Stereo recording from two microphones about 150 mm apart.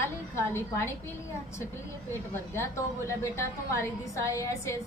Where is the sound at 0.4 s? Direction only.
15° left (ahead or behind).